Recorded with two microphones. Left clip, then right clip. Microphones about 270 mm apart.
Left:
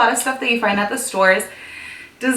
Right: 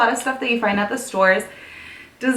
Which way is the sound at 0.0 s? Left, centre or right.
Centre.